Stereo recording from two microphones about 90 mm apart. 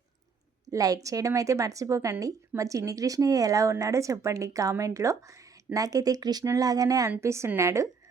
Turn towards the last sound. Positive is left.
turn(degrees=-35)  # may be behind; listen again after turning